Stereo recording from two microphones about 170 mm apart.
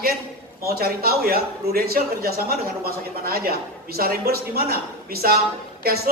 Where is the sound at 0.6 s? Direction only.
65° right (ahead or behind).